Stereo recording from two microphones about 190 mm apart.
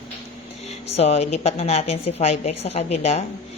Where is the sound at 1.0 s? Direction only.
35° left (ahead or behind).